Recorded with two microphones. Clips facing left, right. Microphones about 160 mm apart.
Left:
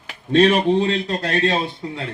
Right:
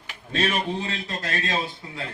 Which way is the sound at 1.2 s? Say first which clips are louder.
Left 10 dB; 70° left (ahead or behind).